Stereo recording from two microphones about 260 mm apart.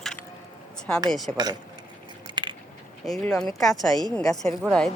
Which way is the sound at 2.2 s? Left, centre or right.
Centre.